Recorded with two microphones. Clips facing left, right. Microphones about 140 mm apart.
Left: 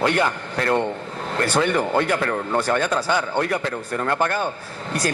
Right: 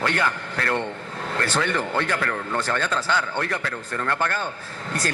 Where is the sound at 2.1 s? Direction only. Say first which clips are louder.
Left 4 dB; 25° left (ahead or behind).